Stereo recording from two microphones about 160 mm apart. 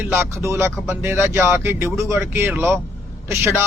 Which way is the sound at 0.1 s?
15° right (ahead or behind).